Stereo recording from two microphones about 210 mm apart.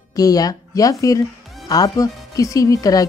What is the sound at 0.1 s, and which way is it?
Speech, 15° left (ahead or behind).